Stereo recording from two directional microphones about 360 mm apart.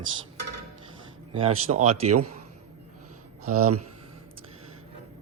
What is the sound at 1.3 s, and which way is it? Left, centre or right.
Speech, centre.